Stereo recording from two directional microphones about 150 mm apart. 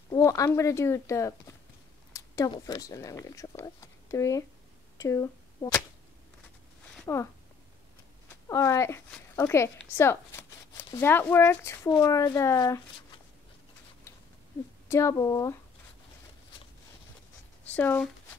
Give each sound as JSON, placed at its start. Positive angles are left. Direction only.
{"t": 0.1, "sound": "speech", "side_deg": 20}
{"t": 7.1, "sound": "speech", "side_deg": 20}
{"t": 8.5, "sound": "speech", "side_deg": 20}
{"t": 9.9, "sound": "a sound", "side_deg": 15}
{"t": 11.0, "sound": "speech", "side_deg": 15}
{"t": 14.9, "sound": "speech", "side_deg": 20}
{"t": 17.7, "sound": "speech", "side_deg": 10}